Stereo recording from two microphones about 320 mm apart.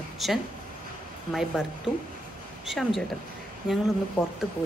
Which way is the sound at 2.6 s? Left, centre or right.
Centre.